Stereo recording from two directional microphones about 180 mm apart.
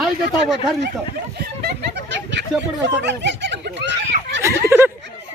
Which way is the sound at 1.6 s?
75° right (ahead or behind).